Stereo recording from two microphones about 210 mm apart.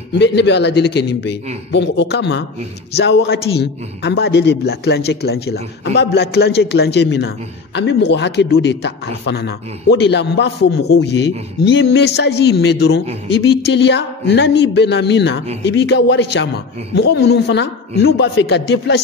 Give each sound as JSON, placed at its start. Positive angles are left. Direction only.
{"t": 0.2, "sound": "a man's voice", "side_deg": 55}